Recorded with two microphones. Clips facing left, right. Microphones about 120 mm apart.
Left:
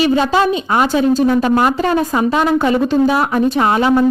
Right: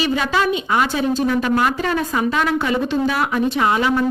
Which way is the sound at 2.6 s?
40° left (ahead or behind).